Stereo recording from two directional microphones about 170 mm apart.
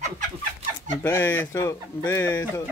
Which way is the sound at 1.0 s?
15° left (ahead or behind).